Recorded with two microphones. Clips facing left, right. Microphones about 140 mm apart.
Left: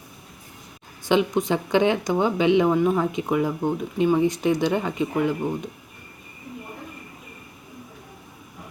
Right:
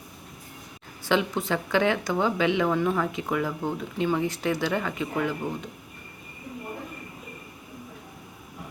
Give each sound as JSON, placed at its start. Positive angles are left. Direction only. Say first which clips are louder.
{"t": 1.0, "sound": "speech", "louder": "left 4 dB", "side_deg": 15}